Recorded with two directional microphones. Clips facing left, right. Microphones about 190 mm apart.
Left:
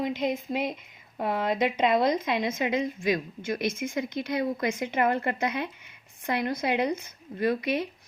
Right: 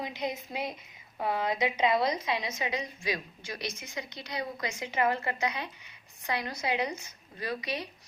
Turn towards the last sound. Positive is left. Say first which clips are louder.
# left 9 dB
turn(degrees=50)  # may be behind; listen again after turning